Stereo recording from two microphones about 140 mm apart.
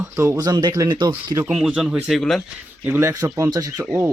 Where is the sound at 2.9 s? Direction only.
15° right (ahead or behind).